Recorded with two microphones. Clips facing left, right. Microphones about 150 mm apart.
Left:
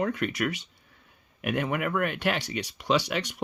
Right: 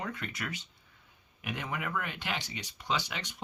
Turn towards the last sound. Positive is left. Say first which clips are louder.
# left 9 dB
turn(degrees=70)  # may be behind; listen again after turning